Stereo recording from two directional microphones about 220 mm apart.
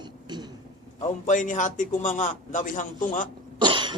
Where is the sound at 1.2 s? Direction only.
35° left (ahead or behind).